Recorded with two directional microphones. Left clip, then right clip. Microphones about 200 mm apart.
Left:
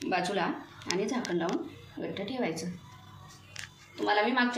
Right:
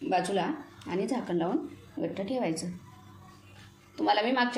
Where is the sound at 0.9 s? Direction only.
35° right (ahead or behind).